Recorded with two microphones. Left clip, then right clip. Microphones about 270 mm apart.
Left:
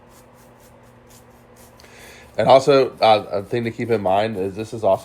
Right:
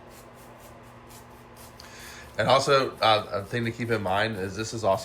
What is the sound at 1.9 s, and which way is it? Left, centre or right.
Speech, left.